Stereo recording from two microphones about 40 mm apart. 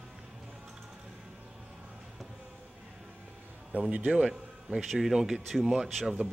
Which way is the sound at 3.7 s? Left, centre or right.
Right.